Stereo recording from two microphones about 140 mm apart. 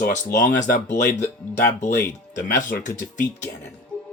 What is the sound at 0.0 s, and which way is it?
Speech, 75° left (ahead or behind).